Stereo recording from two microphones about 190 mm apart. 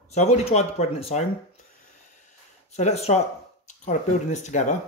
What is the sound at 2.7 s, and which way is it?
Speech, 35° left (ahead or behind).